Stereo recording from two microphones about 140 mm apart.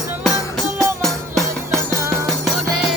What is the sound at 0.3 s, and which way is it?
Music, centre (ahead or behind).